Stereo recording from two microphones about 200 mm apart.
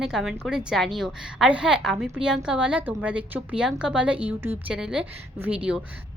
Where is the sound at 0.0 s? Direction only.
Centre (ahead or behind).